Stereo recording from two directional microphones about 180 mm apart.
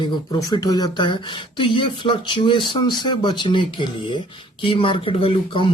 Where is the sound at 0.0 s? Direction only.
25° left (ahead or behind).